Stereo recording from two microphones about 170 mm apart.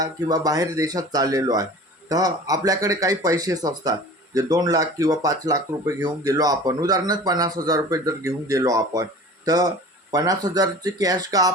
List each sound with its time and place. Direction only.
0.0 s a man's voice: 20° right (ahead or behind)